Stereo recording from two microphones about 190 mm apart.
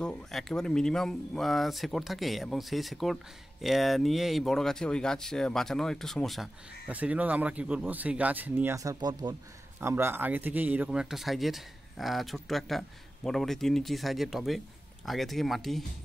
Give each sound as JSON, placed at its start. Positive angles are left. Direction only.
{"t": 0.0, "sound": "speech", "side_deg": 5}